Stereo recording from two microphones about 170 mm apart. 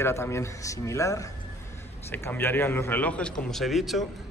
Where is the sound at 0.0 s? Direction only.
15° left (ahead or behind); by 4.1 s centre (ahead or behind).